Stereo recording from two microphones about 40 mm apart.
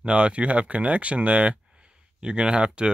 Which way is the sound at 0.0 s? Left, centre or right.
Right.